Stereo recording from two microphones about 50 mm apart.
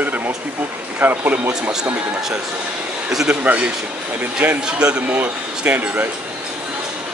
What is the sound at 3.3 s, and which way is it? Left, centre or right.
Speech, right.